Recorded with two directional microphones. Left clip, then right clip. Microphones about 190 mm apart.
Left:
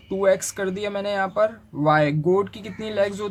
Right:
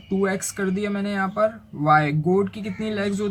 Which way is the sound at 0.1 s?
40° left (ahead or behind).